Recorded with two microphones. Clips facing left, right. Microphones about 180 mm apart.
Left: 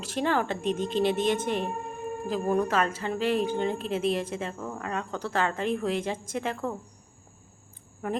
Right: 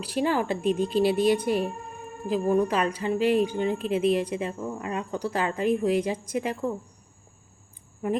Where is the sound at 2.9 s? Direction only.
10° right (ahead or behind).